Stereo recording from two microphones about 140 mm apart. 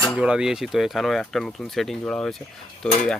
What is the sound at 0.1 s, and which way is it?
Speech, 5° right (ahead or behind).